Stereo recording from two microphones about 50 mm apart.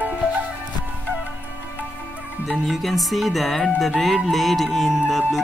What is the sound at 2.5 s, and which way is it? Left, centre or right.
Music, centre.